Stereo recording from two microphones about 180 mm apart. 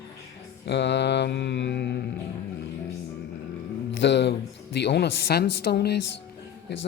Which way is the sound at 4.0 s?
80° left.